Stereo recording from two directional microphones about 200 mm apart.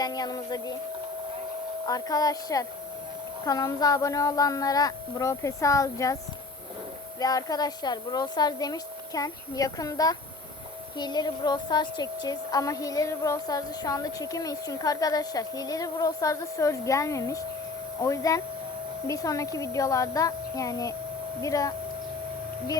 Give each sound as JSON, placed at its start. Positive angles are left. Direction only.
{"t": 0.0, "sound": "speech", "side_deg": 20}
{"t": 1.9, "sound": "a woman's voice", "side_deg": 20}
{"t": 7.2, "sound": "a woman's voice", "side_deg": 20}